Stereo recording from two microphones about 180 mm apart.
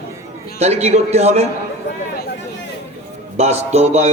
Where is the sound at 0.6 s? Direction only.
35° right (ahead or behind).